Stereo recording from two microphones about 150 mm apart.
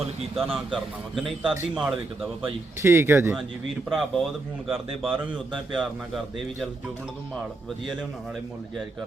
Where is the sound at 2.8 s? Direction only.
20° right (ahead or behind).